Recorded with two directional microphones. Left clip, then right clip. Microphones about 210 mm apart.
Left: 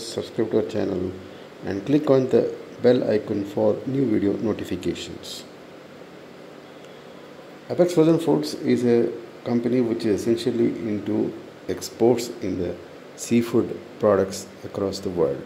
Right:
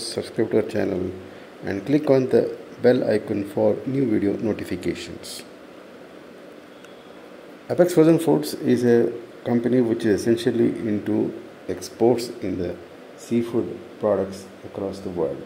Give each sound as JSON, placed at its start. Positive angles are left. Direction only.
{"t": 0.1, "sound": "a man's voice", "side_deg": -5}
{"t": 7.6, "sound": "speech", "side_deg": -10}
{"t": 11.6, "sound": "a man's voice", "side_deg": 0}
{"t": 13.2, "sound": "speech", "side_deg": 15}